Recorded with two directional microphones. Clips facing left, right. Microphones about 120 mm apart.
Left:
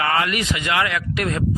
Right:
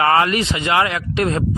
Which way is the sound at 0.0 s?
30° right (ahead or behind).